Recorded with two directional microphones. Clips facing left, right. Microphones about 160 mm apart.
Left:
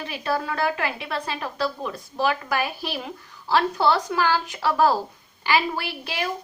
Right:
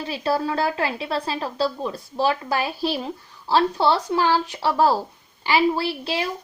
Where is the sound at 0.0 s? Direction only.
30° right (ahead or behind).